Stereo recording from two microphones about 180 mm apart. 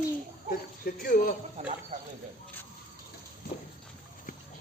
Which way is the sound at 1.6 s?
35° right (ahead or behind).